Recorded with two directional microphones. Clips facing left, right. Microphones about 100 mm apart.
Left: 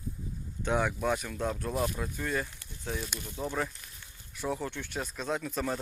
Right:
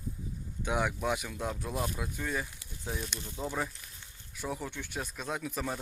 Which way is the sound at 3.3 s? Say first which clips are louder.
Left 1 dB; 15° right (ahead or behind).